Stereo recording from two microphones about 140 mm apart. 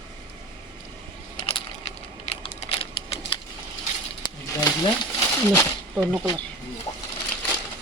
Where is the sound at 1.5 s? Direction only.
45° left (ahead or behind).